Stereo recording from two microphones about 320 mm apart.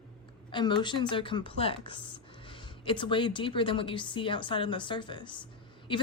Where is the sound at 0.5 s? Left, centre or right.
Centre.